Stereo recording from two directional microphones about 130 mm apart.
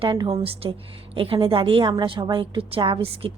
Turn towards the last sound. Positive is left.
turn(degrees=-45)  # may be behind; listen again after turning